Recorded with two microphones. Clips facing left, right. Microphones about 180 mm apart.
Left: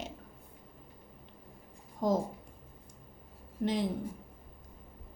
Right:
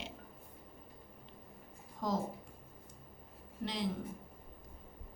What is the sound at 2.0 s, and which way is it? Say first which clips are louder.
Speech: left 7 dB; 50° left (ahead or behind).